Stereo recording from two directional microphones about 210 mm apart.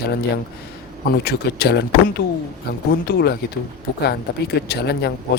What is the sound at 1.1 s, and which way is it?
Speech, 50° left (ahead or behind).